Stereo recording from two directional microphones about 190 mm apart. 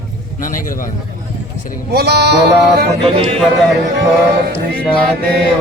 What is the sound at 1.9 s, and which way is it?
Sheep, 60° right (ahead or behind).